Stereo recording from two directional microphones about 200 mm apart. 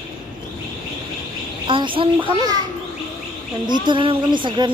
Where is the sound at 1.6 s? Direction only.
25° right (ahead or behind).